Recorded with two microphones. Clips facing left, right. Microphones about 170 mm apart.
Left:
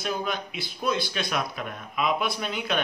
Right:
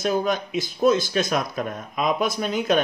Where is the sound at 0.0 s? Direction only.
45° right (ahead or behind).